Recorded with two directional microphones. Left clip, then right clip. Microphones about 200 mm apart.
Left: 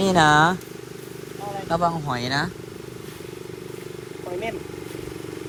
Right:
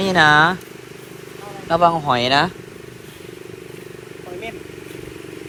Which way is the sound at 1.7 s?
5° left (ahead or behind).